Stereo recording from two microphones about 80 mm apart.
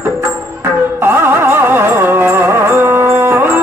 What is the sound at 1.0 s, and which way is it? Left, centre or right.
Music, right.